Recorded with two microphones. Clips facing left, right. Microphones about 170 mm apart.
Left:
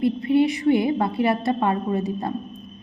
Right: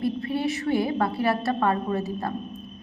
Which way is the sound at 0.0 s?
20° left (ahead or behind).